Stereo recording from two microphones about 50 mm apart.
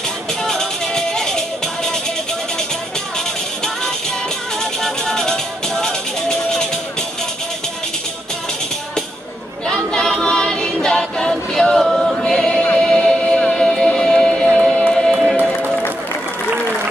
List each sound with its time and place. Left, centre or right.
0.4 s music: centre
4.8 s music: centre
9.7 s a capella: centre
12.3 s music: centre
15.0 s music: centre
15.3 s music: right